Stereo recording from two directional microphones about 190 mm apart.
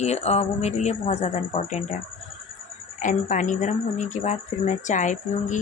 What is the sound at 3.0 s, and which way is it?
Speech, 40° left (ahead or behind).